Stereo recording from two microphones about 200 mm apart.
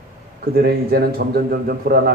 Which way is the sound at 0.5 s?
50° right (ahead or behind).